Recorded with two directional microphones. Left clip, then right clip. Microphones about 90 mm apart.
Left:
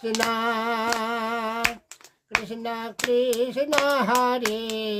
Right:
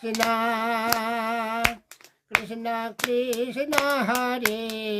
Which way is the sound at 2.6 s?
30° left (ahead or behind).